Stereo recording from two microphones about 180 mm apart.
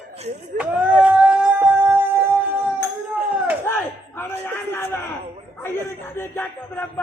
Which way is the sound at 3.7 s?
15° left (ahead or behind).